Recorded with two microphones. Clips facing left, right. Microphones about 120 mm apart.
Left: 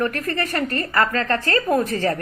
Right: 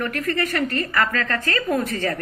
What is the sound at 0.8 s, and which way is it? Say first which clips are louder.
A woman's voice: left 2 dB; 30° left (ahead or behind).